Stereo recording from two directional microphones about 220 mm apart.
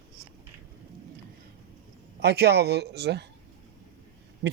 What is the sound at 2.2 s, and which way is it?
Speech, 50° right (ahead or behind).